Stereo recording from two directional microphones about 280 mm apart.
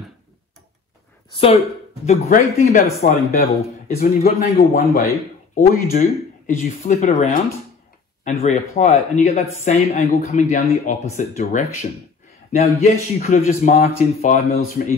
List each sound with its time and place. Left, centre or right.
1.3 s speech: centre
5.5 s speech: left